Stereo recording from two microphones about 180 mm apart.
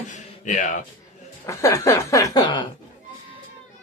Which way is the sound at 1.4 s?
15° left (ahead or behind).